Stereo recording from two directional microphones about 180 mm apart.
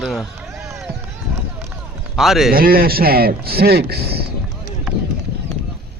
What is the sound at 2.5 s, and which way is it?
A man's voice, 55° right (ahead or behind).